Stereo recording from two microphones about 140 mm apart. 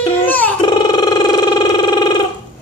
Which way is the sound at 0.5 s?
30° left (ahead or behind).